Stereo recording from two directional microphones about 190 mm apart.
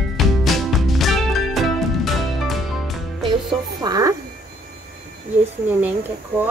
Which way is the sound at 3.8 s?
20° right (ahead or behind).